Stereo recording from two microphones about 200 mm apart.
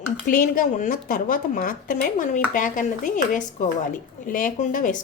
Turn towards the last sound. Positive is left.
turn(degrees=40)  # may be behind; listen again after turning